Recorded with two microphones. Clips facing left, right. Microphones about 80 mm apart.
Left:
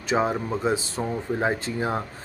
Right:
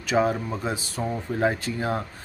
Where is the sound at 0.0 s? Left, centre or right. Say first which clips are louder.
Right 1 dB; left.